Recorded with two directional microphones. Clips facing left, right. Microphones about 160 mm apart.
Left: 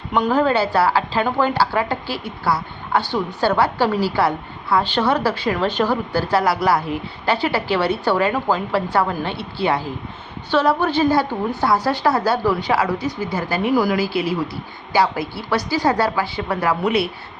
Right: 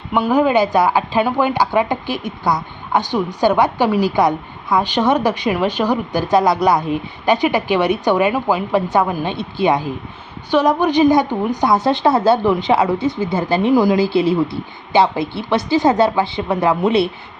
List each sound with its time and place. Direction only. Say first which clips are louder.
0.1 s a woman's voice: right 3 dB; 10° right (ahead or behind)